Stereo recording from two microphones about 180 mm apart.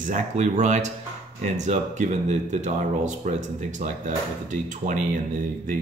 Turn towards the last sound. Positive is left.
turn(degrees=-45)  # may be behind; listen again after turning